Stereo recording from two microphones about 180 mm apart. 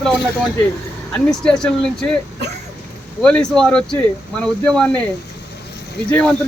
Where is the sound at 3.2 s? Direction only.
5° left (ahead or behind).